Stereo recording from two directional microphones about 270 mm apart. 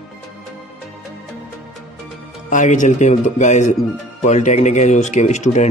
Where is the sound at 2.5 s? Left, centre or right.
Left.